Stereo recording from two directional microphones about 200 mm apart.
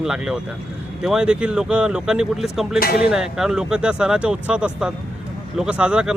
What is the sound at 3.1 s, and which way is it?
Speech, 5° right (ahead or behind).